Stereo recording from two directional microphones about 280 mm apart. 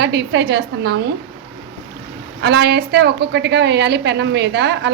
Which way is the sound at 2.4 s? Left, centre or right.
Right.